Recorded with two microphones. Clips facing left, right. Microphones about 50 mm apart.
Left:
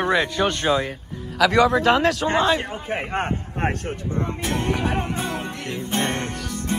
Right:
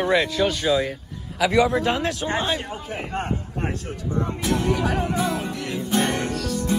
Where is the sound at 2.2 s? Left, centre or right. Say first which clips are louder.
Left 5 dB; left.